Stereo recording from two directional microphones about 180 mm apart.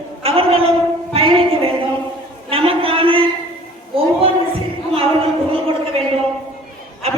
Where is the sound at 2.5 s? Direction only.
30° right (ahead or behind).